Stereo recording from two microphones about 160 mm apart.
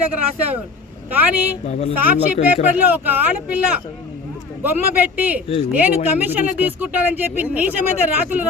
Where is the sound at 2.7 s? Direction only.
10° right (ahead or behind).